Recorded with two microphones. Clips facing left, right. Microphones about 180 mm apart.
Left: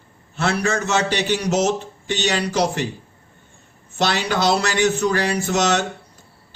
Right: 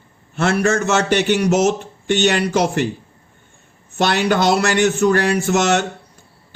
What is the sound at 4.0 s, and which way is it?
Speech, 55° right (ahead or behind).